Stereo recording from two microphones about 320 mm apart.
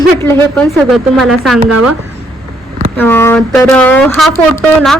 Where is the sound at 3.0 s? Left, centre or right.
Centre.